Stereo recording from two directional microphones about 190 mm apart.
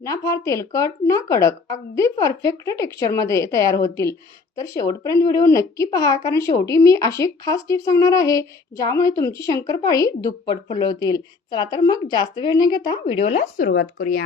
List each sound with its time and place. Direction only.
0.0 s a woman's voice: 15° left (ahead or behind)
13.7 s speech: 55° left (ahead or behind)